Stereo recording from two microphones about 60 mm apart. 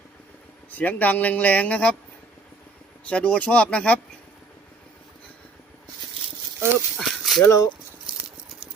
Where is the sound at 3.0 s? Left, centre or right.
Left.